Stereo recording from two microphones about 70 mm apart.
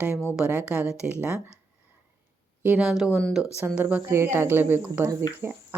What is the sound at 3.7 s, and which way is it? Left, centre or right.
Speech, right.